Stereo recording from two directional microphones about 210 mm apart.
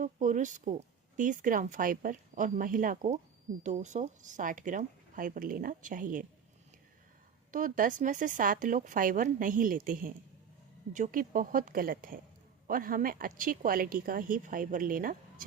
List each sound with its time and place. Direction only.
0.0 s speech: 35° right (ahead or behind)
7.5 s speech: 40° right (ahead or behind)